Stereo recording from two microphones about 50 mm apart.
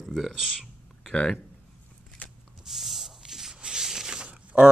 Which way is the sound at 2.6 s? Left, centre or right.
Centre.